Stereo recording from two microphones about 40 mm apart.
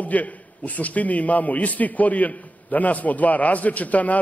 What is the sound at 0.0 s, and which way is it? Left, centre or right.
A man's voice, left.